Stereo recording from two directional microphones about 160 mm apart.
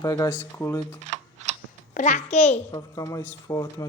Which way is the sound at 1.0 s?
45° right (ahead or behind).